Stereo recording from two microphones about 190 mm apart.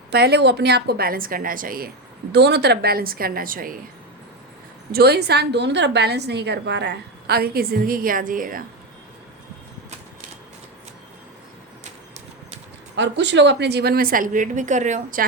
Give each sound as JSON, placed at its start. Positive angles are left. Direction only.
{"t": 0.1, "sound": "a woman's voice", "side_deg": -60}
{"t": 2.3, "sound": "a woman's voice", "side_deg": -60}
{"t": 4.9, "sound": "a woman's voice", "side_deg": -55}
{"t": 13.0, "sound": "a woman's voice", "side_deg": -70}